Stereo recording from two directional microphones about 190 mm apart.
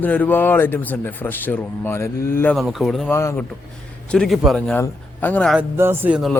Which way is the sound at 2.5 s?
Centre (ahead or behind).